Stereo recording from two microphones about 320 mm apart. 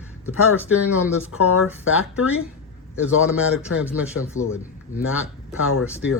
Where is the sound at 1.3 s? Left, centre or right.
Left.